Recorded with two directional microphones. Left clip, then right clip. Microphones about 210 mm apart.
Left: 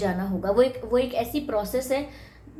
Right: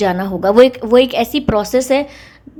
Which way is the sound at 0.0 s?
45° right (ahead or behind).